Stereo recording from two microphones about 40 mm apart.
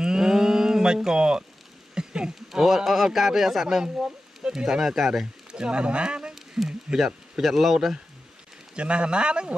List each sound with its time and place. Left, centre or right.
0.0 s cattle: centre
2.0 s a sound: centre
2.5 s a man's voice: centre
3.8 s speech: centre
4.6 s a man's voice: centre
5.2 s speech: right
6.5 s a sound: centre
7.3 s a man's voice: centre
8.7 s speech: right